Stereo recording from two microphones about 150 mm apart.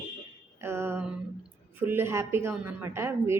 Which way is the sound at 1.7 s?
15° right (ahead or behind).